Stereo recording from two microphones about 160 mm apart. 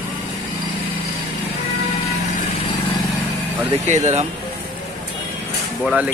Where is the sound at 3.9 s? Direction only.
45° right (ahead or behind).